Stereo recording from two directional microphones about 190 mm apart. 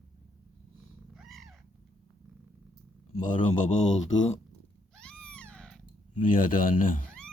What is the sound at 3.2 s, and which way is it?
Speech, 40° left (ahead or behind).